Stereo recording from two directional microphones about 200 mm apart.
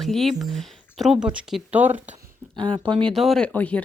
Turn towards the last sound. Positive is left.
turn(degrees=5)  # may be behind; listen again after turning